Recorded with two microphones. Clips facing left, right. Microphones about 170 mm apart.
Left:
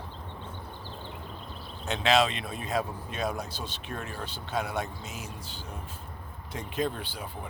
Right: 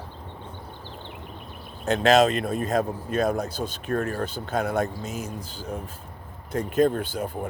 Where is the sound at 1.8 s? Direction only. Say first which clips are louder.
Right 6 dB; 45° right (ahead or behind).